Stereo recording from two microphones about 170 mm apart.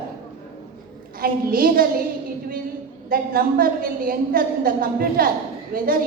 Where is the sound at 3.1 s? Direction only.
60° right (ahead or behind).